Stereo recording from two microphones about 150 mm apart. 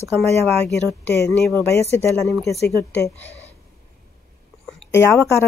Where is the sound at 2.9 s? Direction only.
10° left (ahead or behind).